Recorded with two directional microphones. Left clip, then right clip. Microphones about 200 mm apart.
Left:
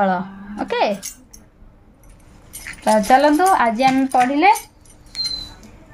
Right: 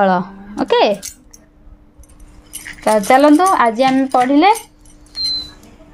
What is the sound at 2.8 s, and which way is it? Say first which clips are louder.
Speech: right 3 dB; 45° right (ahead or behind).